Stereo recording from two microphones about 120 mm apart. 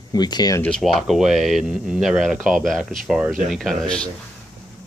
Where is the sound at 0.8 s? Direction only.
Centre (ahead or behind).